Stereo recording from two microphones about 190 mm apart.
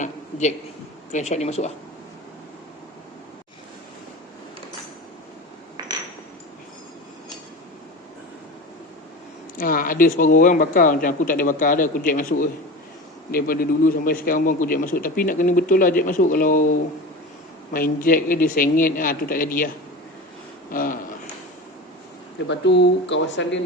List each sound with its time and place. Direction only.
0.0 s a sound: 40° left (ahead or behind)
1.1 s speech: 35° left (ahead or behind)
9.6 s a man's voice: 45° left (ahead or behind)
17.7 s a man's voice: 50° left (ahead or behind)
20.7 s a man's voice: 45° left (ahead or behind)
22.4 s speech: 65° left (ahead or behind)